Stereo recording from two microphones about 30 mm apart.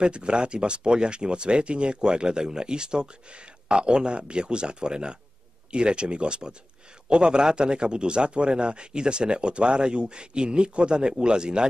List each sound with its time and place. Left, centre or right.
0.0 s a man's voice: right